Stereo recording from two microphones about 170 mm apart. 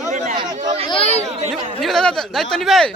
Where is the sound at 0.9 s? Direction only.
35° left (ahead or behind).